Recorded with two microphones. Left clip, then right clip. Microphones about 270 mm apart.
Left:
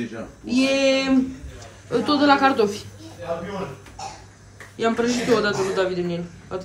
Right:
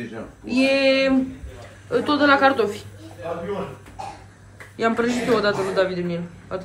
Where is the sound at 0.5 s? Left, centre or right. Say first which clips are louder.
Right 1 dB; centre.